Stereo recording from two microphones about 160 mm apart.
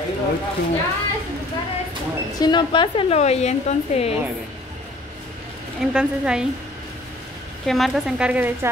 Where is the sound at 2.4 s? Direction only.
30° left (ahead or behind).